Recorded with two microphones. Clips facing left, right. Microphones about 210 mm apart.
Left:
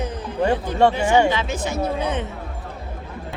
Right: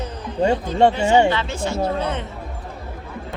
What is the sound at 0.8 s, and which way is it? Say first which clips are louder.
Speech: right 1 dB; 25° right (ahead or behind).